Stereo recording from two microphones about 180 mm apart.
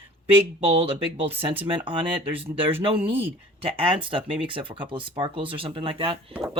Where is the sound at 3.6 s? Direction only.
30° right (ahead or behind).